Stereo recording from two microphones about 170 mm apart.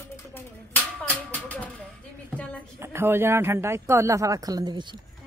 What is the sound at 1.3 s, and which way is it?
Speech, 10° left (ahead or behind).